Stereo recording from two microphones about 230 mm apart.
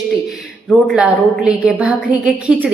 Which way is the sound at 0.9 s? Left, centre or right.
Centre.